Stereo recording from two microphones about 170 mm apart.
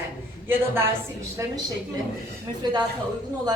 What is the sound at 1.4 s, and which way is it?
Speech, 15° right (ahead or behind).